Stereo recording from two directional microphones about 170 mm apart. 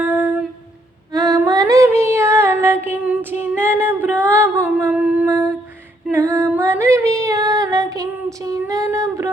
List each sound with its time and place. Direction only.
0.0 s humming: 10° right (ahead or behind)
1.1 s female singing: 20° right (ahead or behind)
3.4 s a sound: 15° right (ahead or behind)
4.3 s humming: 10° right (ahead or behind)
6.1 s female singing: 15° right (ahead or behind)